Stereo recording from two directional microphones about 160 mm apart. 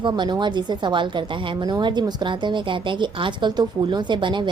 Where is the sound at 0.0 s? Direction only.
30° right (ahead or behind).